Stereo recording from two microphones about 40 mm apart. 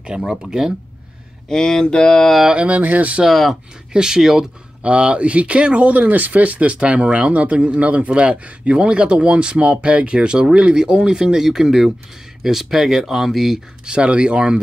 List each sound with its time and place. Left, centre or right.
0.2 s speech: centre
1.5 s mantra: centre
2.5 s speech: right
2.8 s speech: right
3.3 s speech: centre
3.9 s speech: centre
4.8 s speech: right; by 13.6 s centre
13.8 s speech: right